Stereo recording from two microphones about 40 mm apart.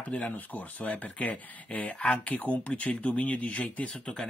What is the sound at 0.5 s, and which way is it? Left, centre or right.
Speech, left.